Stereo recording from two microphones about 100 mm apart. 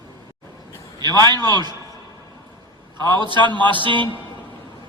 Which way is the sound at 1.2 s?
45° right (ahead or behind).